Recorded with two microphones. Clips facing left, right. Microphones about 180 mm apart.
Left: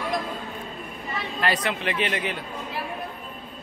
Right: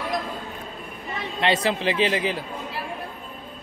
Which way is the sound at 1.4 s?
25° right (ahead or behind).